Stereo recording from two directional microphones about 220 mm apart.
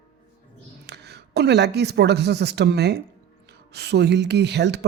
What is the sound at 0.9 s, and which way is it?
A woman's voice, 50° right (ahead or behind).